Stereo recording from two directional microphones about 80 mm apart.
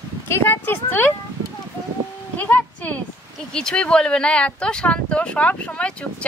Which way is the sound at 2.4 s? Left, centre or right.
Left.